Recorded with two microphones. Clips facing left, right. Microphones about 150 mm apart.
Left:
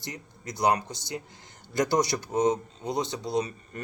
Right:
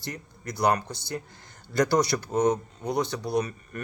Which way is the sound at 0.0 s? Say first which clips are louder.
Right 2 dB; 20° left (ahead or behind).